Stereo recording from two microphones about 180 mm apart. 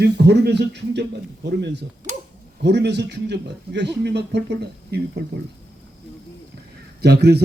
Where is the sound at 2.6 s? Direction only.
70° right (ahead or behind).